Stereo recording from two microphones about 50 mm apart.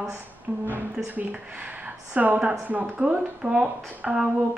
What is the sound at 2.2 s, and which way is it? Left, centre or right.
A woman's voice, right.